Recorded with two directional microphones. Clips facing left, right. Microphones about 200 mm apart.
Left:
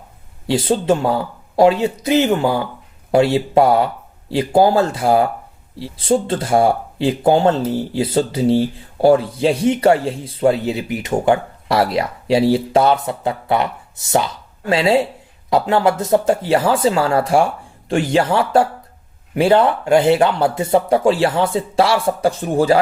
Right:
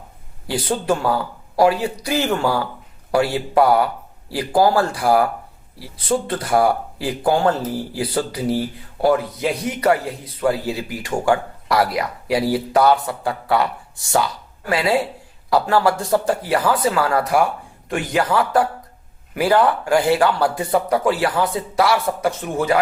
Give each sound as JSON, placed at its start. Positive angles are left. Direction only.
{"t": 0.4, "sound": "speech", "side_deg": 25}